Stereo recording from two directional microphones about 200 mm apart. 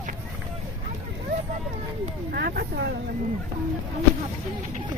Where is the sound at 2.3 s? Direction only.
50° right (ahead or behind).